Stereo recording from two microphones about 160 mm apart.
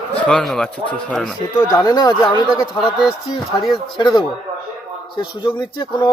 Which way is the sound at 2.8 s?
Centre (ahead or behind).